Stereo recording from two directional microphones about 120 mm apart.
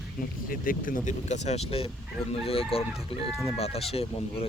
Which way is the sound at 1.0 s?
75° left (ahead or behind).